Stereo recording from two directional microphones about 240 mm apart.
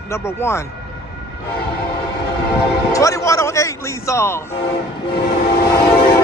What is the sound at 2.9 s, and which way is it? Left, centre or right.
Speech, centre.